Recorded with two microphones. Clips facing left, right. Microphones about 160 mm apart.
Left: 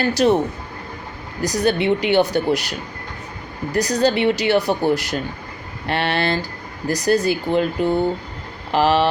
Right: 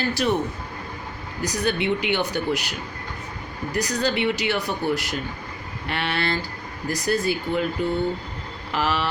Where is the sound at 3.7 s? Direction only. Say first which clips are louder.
Left 6 dB; 35° left (ahead or behind).